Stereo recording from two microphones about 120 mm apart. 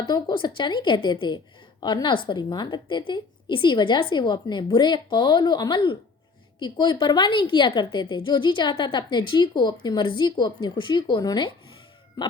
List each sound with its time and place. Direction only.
0.1 s a woman's voice: 35° left (ahead or behind)